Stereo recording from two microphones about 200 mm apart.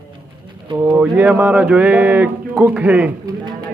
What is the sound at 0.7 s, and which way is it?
Speech, 10° right (ahead or behind).